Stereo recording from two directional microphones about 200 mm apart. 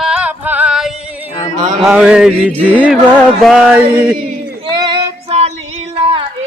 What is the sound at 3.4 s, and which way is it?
Music, centre (ahead or behind).